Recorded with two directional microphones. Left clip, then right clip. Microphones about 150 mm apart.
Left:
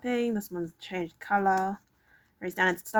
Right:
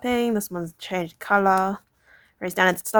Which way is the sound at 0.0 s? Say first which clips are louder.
Right 6 dB; 35° right (ahead or behind).